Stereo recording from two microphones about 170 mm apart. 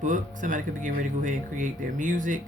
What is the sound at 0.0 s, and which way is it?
Speech, 50° right (ahead or behind).